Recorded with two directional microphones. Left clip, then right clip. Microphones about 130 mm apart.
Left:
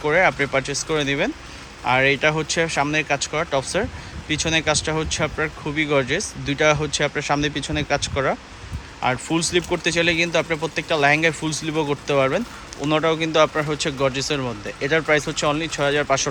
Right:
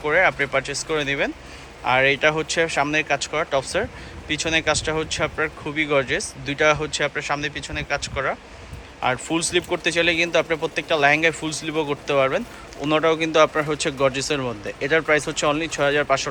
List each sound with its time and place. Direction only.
0.0 s speech: 20° left (ahead or behind)
9.0 s speech: 10° left (ahead or behind)